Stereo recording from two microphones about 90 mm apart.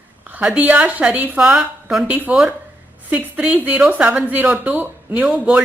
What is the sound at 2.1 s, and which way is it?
A woman's voice, 20° right (ahead or behind).